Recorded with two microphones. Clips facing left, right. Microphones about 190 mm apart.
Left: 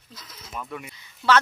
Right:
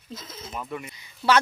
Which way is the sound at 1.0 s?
10° right (ahead or behind).